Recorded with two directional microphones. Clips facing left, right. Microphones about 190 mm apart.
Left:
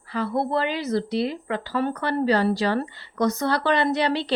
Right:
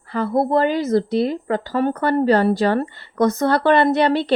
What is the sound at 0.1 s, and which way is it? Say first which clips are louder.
A woman's voice: right 6 dB; 50° right (ahead or behind).